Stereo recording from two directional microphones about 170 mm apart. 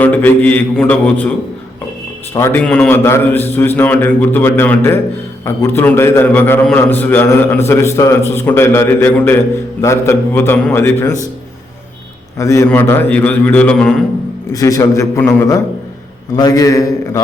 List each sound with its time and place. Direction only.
0.0 s a man's voice: 10° left (ahead or behind)
2.3 s a man's voice: 15° left (ahead or behind)
12.4 s a man's voice: 15° left (ahead or behind)
14.5 s a man's voice: 20° left (ahead or behind)